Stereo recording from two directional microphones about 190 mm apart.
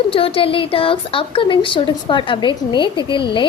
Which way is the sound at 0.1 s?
30° left (ahead or behind).